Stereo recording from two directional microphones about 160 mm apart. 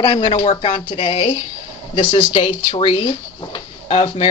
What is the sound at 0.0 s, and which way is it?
Speech, 30° left (ahead or behind).